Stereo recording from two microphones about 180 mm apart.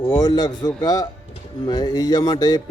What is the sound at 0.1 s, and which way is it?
A man's voice, 20° left (ahead or behind).